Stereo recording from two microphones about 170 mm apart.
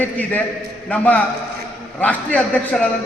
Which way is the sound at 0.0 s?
10° left (ahead or behind).